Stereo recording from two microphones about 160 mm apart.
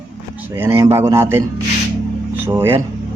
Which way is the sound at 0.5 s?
15° right (ahead or behind).